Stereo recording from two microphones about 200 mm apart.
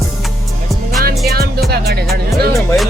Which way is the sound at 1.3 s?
50° right (ahead or behind).